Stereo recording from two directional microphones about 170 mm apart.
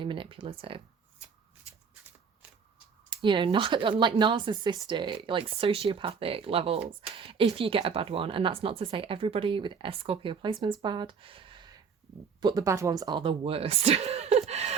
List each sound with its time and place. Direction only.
0.0 s speech: 30° right (ahead or behind)
3.2 s speech: 30° right (ahead or behind)